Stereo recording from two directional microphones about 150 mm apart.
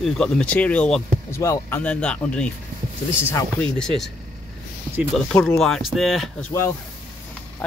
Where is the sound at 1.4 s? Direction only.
20° left (ahead or behind).